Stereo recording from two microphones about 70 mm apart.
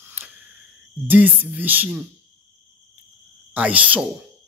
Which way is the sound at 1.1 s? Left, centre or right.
Right.